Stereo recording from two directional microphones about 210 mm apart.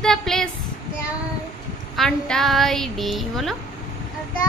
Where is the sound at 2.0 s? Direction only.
5° left (ahead or behind).